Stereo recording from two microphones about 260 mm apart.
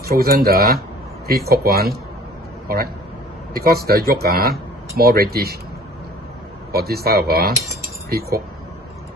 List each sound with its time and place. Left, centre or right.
0.0 s a man's voice: right
6.7 s speech: right